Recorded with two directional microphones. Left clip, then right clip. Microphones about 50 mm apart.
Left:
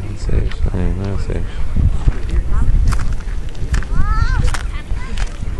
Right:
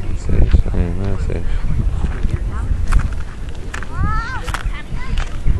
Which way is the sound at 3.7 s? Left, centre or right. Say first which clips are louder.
Right 1 dB; right.